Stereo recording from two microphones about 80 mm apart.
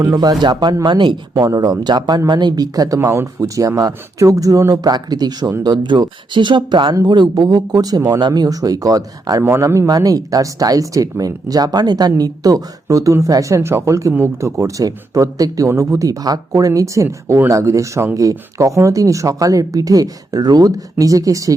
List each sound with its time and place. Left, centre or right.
0.0 s speech: right
0.9 s speech: right
1.3 s speech: right
3.0 s speech: right
5.6 s speech: right
7.4 s speech: right
9.4 s speech: right